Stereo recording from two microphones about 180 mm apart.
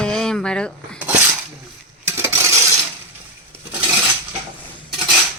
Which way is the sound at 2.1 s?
15° right (ahead or behind).